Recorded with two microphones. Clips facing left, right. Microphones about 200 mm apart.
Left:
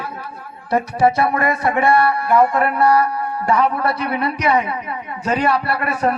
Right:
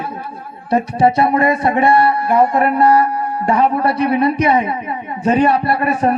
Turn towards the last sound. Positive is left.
turn(degrees=-25)  # may be behind; listen again after turning